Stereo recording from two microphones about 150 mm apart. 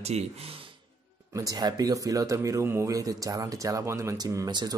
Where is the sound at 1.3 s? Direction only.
25° right (ahead or behind).